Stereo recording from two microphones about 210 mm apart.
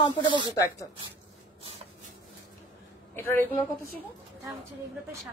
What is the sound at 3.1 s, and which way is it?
Speech, 10° left (ahead or behind).